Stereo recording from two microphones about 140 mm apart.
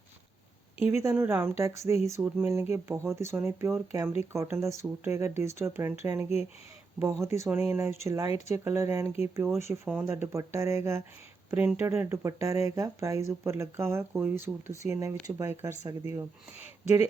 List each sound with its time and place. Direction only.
0.8 s speech: 15° right (ahead or behind)
7.3 s speech: 20° right (ahead or behind)